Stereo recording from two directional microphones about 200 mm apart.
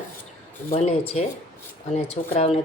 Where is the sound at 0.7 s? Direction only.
30° left (ahead or behind).